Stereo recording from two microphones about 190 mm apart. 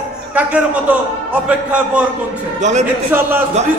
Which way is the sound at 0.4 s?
5° right (ahead or behind).